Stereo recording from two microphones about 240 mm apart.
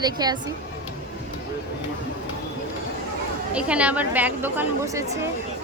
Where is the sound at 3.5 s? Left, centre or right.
Centre.